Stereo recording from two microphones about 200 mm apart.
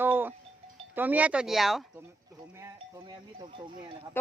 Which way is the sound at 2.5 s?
15° right (ahead or behind).